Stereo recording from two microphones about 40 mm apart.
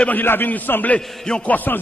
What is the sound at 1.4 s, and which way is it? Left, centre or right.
Speech, left.